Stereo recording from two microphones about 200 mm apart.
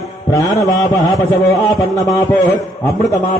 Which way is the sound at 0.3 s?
15° left (ahead or behind).